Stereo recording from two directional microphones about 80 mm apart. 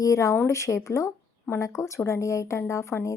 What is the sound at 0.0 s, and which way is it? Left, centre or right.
A woman's voice, left.